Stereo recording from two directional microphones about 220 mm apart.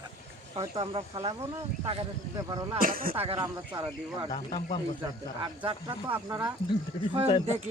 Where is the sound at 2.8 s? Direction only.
40° right (ahead or behind).